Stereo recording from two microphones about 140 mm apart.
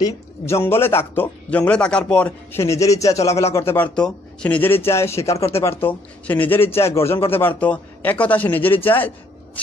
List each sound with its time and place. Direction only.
0.0 s a man's voice: 20° left (ahead or behind)